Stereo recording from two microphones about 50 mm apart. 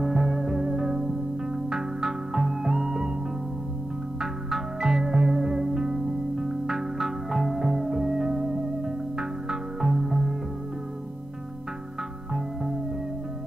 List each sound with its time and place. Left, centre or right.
0.0 s music: centre
0.7 s music: centre
4.2 s music: centre